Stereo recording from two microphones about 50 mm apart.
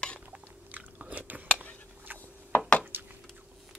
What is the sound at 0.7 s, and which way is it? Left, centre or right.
Biting, right.